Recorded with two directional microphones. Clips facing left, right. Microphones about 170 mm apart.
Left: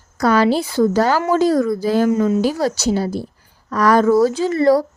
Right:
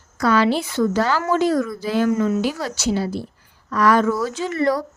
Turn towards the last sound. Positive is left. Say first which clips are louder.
# left 6 dB
turn(degrees=35)  # may be behind; listen again after turning